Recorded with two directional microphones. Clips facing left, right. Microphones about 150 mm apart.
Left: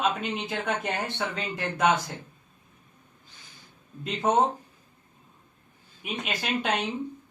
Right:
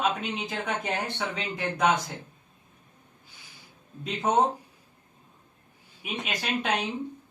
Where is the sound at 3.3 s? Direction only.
10° right (ahead or behind).